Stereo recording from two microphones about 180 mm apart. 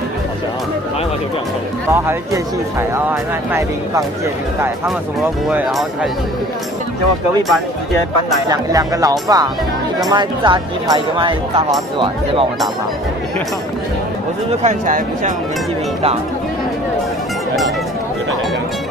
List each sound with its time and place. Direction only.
5.5 s speech: 5° right (ahead or behind)
8.5 s speech: 20° right (ahead or behind)
14.6 s speech: 45° right (ahead or behind)